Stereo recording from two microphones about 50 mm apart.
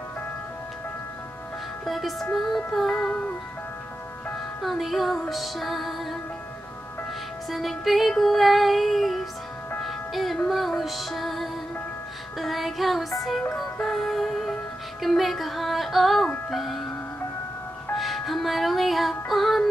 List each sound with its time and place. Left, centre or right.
1.9 s music: centre
3.1 s music: left
4.6 s music: centre
7.4 s music: centre
17.9 s music: centre